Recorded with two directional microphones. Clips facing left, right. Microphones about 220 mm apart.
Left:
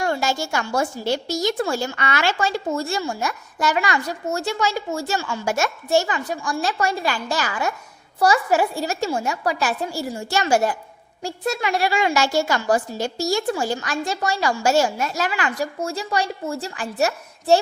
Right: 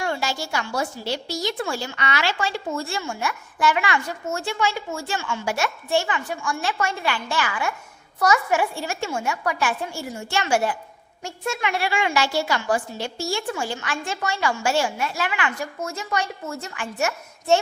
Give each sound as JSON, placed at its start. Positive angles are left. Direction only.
{"t": 0.0, "sound": "a woman's voice", "side_deg": 45}